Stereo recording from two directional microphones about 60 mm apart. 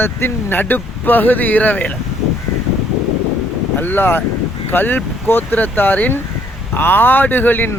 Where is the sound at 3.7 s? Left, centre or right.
Left.